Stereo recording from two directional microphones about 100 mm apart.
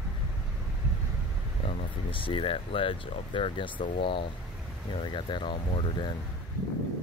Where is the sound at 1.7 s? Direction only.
75° left (ahead or behind); by 6.1 s 55° left (ahead or behind).